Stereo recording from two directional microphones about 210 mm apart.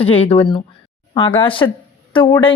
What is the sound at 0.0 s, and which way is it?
Speech, 25° left (ahead or behind).